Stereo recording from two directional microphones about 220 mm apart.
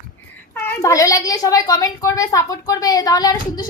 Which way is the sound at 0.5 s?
10° left (ahead or behind).